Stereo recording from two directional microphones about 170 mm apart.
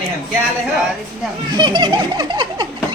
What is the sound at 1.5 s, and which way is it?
A woman's voice, 25° right (ahead or behind).